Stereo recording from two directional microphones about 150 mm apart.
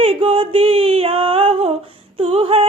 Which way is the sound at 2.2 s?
40° right (ahead or behind).